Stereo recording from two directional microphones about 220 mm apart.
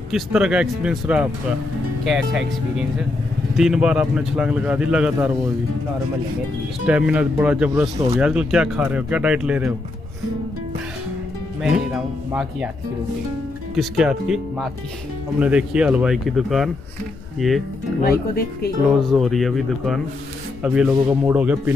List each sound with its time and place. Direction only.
0.1 s speech: 5° right (ahead or behind)
6.9 s speech: 5° right (ahead or behind)
11.6 s speech: 5° right (ahead or behind)
13.7 s speech: 5° right (ahead or behind)
18.0 s speech: 45° left (ahead or behind)
18.9 s speech: centre (ahead or behind)